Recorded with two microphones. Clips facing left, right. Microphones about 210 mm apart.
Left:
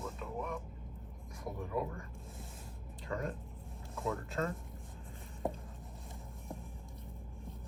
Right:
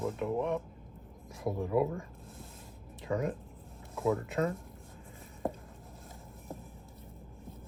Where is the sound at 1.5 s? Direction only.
30° right (ahead or behind).